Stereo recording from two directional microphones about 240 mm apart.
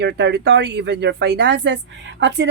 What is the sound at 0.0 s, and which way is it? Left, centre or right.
Speech, right.